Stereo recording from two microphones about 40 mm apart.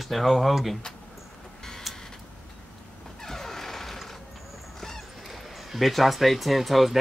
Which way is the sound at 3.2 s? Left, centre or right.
Centre.